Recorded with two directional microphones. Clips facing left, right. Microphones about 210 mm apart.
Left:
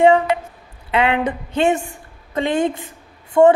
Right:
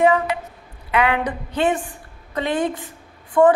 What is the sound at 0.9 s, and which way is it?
A man's voice, 25° left (ahead or behind).